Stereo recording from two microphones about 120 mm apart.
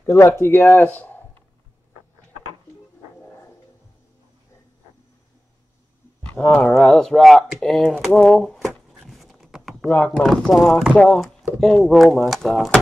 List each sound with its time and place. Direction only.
0.0 s speech: 25° left (ahead or behind)
6.2 s speech: 10° left (ahead or behind)
8.0 s a sound: 5° left (ahead or behind)
9.8 s speech: 15° left (ahead or behind); by 11.0 s 5° right (ahead or behind)
11.0 s speech: 5° left (ahead or behind)